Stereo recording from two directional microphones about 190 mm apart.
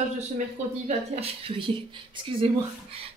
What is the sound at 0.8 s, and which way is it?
Speech, 30° right (ahead or behind).